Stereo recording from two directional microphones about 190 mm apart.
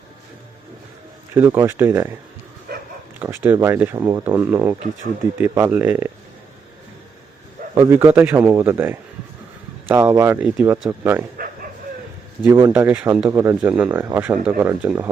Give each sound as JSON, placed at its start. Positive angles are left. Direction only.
{"t": 1.3, "sound": "speech", "side_deg": -10}
{"t": 2.7, "sound": "dog", "side_deg": -55}
{"t": 3.2, "sound": "speech", "side_deg": -10}
{"t": 7.8, "sound": "speech", "side_deg": -15}
{"t": 11.3, "sound": "bow-wow", "side_deg": -45}
{"t": 12.5, "sound": "speech", "side_deg": -20}